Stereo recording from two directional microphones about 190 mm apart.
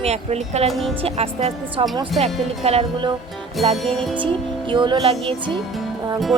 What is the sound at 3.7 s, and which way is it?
Music, centre (ahead or behind).